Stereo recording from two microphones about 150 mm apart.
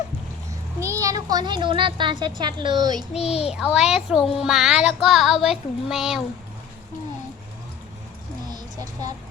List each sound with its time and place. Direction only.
1.0 s speech: 25° right (ahead or behind)
3.2 s a child's voice: 40° left (ahead or behind)
3.5 s a child's voice: 5° right (ahead or behind)
8.4 s a sound: 25° right (ahead or behind)